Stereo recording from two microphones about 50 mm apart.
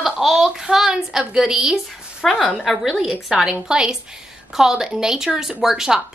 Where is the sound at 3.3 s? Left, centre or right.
Centre.